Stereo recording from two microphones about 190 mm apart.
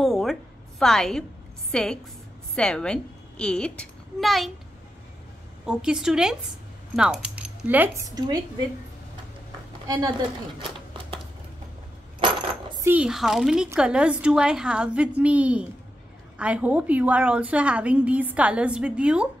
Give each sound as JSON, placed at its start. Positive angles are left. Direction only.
{"t": 0.0, "sound": "a sound", "side_deg": 0}
{"t": 1.7, "sound": "a woman's voice", "side_deg": 5}
{"t": 5.7, "sound": "a woman's voice", "side_deg": -5}
{"t": 9.8, "sound": "a woman's voice", "side_deg": -20}
{"t": 10.6, "sound": "a sound", "side_deg": -25}
{"t": 12.7, "sound": "a woman's voice", "side_deg": -10}